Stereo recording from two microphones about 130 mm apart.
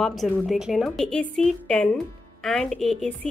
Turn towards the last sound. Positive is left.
turn(degrees=5)  # may be behind; listen again after turning